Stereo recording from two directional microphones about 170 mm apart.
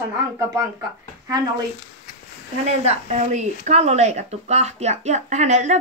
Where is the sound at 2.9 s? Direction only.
40° right (ahead or behind).